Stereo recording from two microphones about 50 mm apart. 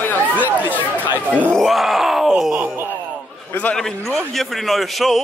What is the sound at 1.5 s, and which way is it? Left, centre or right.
Groan, centre.